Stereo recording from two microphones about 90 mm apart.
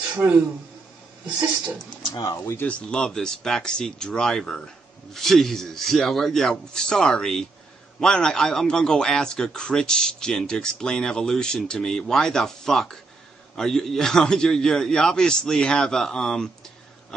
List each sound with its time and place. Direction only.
0.1 s a man's voice: 15° right (ahead or behind)
2.3 s speech: 30° left (ahead or behind)
2.6 s a man's voice: 10° left (ahead or behind)